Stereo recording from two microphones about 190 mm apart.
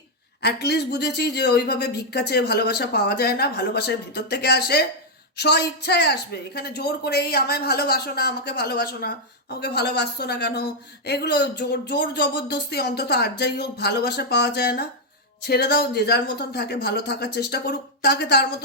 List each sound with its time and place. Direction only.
0.4 s a woman's voice: 60° left (ahead or behind)